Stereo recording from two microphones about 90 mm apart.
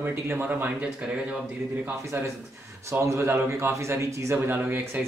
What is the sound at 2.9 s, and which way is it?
Speech, 30° right (ahead or behind).